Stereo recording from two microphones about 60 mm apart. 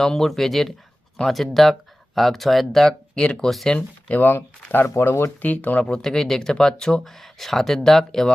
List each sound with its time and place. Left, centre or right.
0.0 s speech: centre
3.2 s speech: centre
3.4 s speech: centre
3.8 s speech: left
4.7 s speech: left
5.4 s speech: left
5.8 s speech: centre